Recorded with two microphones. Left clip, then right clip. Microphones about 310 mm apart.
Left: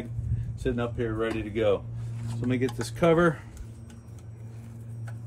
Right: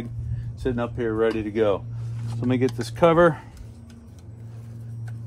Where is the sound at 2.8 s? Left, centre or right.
Centre.